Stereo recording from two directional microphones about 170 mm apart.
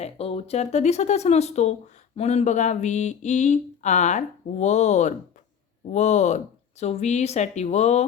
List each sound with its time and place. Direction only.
0.0 s speech: 35° left (ahead or behind)